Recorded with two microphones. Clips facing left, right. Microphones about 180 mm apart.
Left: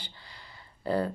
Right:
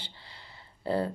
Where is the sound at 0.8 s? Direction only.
25° right (ahead or behind).